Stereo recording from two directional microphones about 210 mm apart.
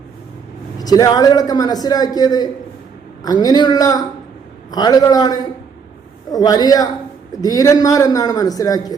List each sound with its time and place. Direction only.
0.8 s a man's voice: 15° left (ahead or behind)